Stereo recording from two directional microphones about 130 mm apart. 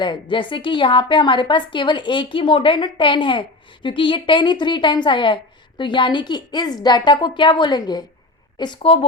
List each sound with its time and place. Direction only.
0.0 s a woman's voice: 40° left (ahead or behind)